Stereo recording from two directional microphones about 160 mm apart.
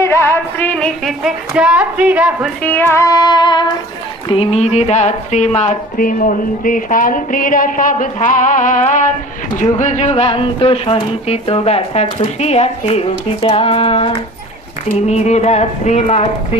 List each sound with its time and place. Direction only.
0.0 s music: 15° left (ahead or behind); by 2.5 s 10° right (ahead or behind)
2.6 s child singing: 15° left (ahead or behind); by 3.7 s 30° left (ahead or behind)
4.3 s speech: 40° left (ahead or behind)